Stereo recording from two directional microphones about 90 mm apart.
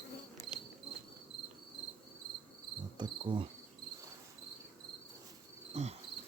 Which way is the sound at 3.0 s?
65° right (ahead or behind).